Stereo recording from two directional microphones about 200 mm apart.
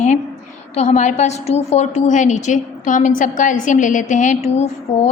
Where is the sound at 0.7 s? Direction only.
35° left (ahead or behind).